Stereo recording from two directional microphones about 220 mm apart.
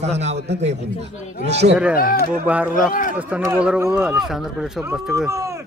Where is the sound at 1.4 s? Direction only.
50° right (ahead or behind).